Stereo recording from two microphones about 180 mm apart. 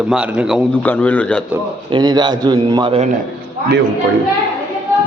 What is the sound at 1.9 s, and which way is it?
A man's voice, 25° right (ahead or behind).